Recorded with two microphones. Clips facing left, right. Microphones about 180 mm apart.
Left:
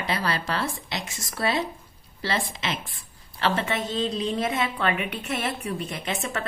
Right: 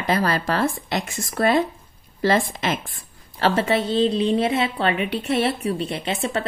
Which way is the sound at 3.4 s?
40° right (ahead or behind).